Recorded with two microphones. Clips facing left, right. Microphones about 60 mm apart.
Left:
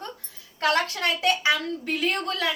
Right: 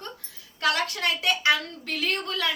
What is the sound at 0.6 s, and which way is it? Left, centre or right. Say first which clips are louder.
Speech: left 2 dB; left.